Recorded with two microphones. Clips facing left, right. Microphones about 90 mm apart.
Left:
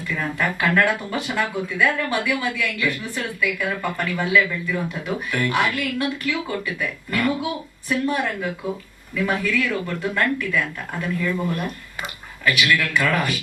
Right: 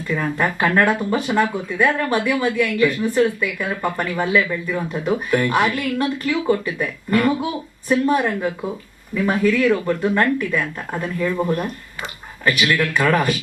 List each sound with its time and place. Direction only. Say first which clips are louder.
0.1 s speech: right 4 dB; 35° right (ahead or behind)